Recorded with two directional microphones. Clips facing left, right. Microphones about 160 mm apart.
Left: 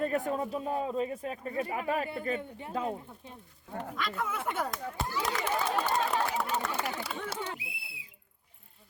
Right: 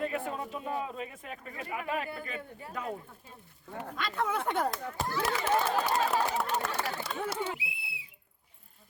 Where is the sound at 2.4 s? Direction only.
25° left (ahead or behind).